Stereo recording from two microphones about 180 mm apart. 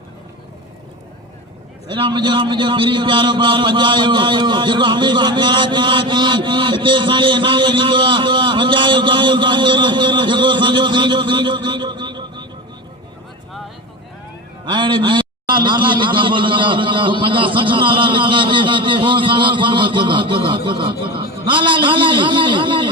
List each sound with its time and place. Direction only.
1.9 s a man's voice: 25° right (ahead or behind)
14.6 s a man's voice: 25° right (ahead or behind)